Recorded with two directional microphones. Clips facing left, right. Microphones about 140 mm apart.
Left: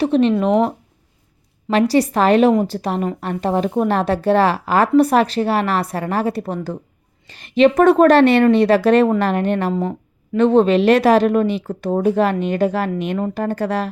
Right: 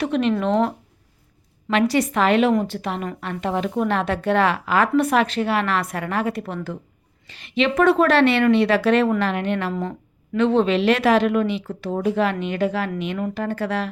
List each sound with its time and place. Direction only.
0.0 s a woman's voice: 30° left (ahead or behind)
0.4 s speech: 10° left (ahead or behind)
1.7 s a woman's voice: 35° left (ahead or behind)